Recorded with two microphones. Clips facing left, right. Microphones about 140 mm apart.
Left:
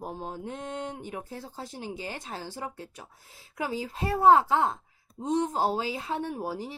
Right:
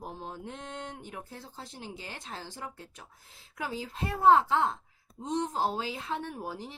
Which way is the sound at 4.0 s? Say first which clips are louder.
Left 2 dB; 40° left (ahead or behind).